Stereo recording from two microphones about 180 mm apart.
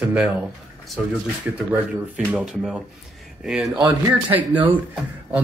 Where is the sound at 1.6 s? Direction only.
5° right (ahead or behind).